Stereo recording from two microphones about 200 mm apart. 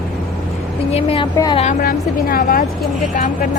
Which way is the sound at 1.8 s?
45° left (ahead or behind).